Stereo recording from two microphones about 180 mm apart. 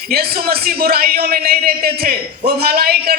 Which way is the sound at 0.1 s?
60° right (ahead or behind).